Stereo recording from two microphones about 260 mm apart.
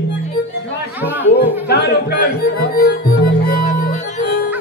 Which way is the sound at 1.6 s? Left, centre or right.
Left.